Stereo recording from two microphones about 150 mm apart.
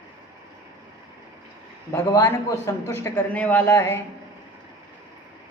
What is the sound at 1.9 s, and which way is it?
A man's voice, 20° left (ahead or behind).